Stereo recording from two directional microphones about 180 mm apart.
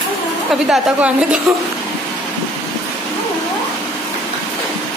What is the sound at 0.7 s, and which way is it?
Speech, 5° right (ahead or behind).